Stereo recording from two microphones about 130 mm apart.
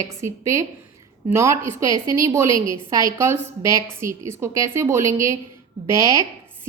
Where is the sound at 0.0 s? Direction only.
20° right (ahead or behind).